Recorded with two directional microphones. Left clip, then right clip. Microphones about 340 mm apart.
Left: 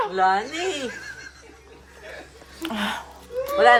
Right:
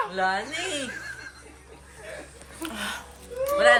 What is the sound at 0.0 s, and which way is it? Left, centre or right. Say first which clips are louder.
Speech: left 5 dB; left.